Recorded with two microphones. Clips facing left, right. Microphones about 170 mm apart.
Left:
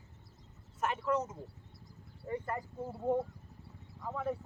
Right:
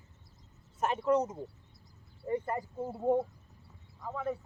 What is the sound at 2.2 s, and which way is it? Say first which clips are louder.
Speech: right 4 dB; 25° right (ahead or behind).